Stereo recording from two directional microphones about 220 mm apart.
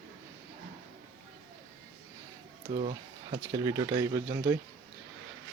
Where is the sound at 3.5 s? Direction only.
15° right (ahead or behind).